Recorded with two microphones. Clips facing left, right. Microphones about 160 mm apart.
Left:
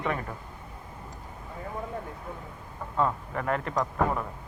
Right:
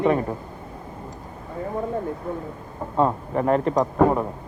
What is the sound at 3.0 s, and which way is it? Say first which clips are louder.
A man's voice: right 7 dB; 30° right (ahead or behind).